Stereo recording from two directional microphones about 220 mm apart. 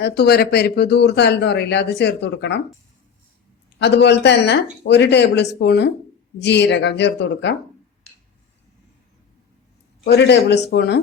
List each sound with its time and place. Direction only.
0.0 s speech: 45° left (ahead or behind)
3.8 s speech: 50° left (ahead or behind)
10.0 s speech: 50° left (ahead or behind)